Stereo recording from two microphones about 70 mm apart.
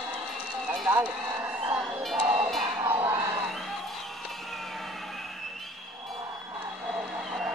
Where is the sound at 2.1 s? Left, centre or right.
Centre.